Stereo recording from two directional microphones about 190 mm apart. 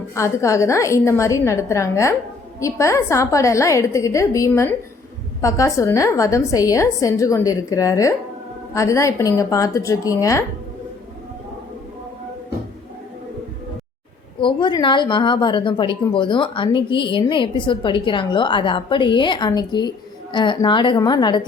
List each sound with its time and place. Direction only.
0.1 s a woman's voice: 15° left (ahead or behind)
14.4 s a woman's voice: 25° left (ahead or behind)